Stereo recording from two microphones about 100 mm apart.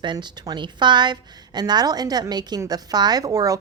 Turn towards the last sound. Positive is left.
turn(degrees=-35)  # may be behind; listen again after turning